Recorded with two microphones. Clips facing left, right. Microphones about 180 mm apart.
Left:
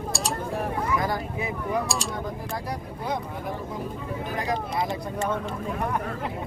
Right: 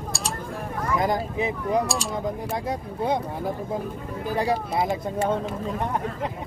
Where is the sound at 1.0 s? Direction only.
20° right (ahead or behind).